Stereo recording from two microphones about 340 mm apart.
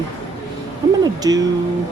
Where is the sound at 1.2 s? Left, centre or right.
Centre.